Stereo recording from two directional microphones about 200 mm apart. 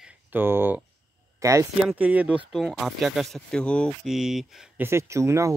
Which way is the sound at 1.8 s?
5° right (ahead or behind).